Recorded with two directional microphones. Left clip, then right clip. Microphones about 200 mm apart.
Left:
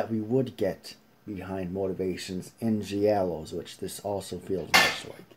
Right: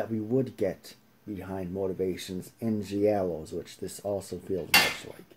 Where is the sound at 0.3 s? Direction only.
5° right (ahead or behind).